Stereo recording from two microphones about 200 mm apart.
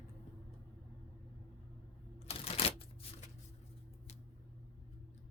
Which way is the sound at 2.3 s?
30° left (ahead or behind).